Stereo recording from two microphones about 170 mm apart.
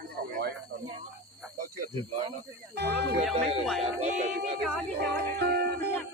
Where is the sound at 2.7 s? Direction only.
75° right (ahead or behind).